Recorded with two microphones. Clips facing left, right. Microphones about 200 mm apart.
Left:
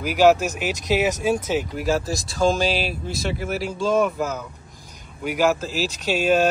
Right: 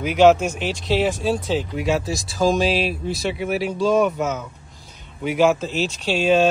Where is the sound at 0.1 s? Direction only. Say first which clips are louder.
Right 2 dB; 5° left (ahead or behind).